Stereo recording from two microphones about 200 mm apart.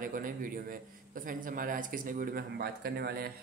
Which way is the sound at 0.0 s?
45° right (ahead or behind).